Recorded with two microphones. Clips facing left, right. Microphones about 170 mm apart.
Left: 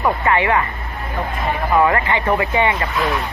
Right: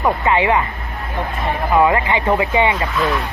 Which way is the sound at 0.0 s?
20° right (ahead or behind).